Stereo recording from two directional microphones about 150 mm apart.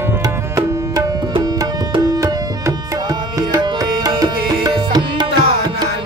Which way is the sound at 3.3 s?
25° right (ahead or behind).